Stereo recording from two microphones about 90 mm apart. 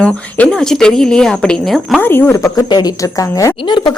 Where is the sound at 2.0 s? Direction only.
20° left (ahead or behind).